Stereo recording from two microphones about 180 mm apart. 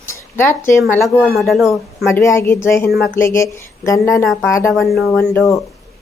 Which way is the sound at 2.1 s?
15° left (ahead or behind).